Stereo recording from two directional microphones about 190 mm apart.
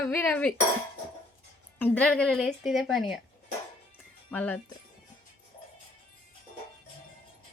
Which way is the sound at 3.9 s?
10° left (ahead or behind).